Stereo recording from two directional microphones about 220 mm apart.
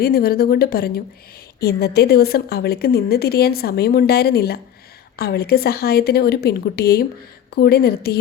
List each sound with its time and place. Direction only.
0.0 s a woman's voice: 45° left (ahead or behind)